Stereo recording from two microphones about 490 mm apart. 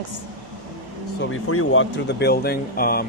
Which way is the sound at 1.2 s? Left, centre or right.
Left.